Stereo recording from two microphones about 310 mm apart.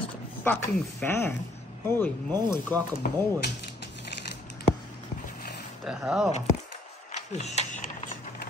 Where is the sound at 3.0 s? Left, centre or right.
Left.